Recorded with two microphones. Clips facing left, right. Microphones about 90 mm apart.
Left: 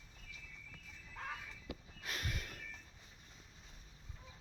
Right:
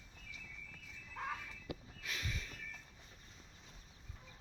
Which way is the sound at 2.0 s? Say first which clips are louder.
Left 1 dB; 50° left (ahead or behind).